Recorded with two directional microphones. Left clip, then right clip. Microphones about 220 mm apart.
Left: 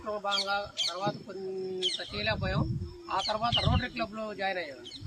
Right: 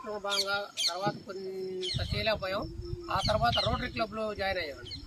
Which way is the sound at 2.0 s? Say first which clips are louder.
Right 1 dB; 20° right (ahead or behind).